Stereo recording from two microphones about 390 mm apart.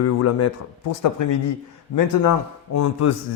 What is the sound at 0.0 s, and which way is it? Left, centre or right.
Speech, left.